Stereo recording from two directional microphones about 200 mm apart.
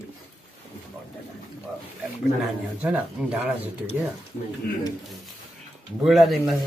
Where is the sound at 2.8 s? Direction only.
5° right (ahead or behind).